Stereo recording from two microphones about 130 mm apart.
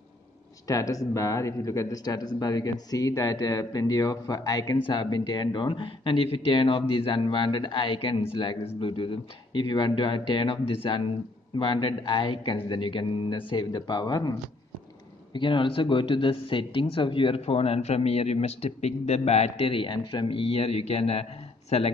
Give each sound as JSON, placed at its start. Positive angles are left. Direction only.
{"t": 0.7, "sound": "speech", "side_deg": 25}
{"t": 15.3, "sound": "speech", "side_deg": 40}